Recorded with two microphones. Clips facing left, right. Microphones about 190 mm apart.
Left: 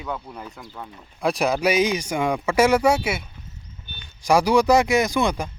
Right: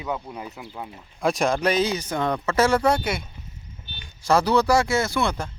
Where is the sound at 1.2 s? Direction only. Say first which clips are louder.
Left 1 dB; centre (ahead or behind).